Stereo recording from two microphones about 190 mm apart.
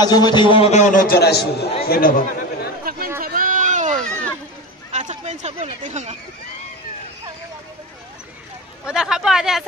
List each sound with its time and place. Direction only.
0.0 s a man's voice: 20° left (ahead or behind); by 1.7 s 60° left (ahead or behind)
1.9 s speech: 45° left (ahead or behind)
2.8 s chatter: 50° right (ahead or behind)
3.2 s a sound: 50° right (ahead or behind)
8.8 s speech: 5° right (ahead or behind)